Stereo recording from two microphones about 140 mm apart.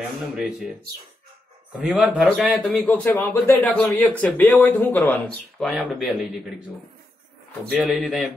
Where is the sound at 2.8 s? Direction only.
15° left (ahead or behind).